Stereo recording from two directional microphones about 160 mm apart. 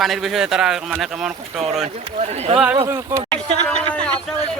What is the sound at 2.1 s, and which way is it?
Speech, 40° right (ahead or behind).